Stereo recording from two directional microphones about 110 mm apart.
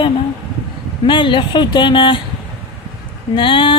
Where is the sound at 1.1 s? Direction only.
45° left (ahead or behind).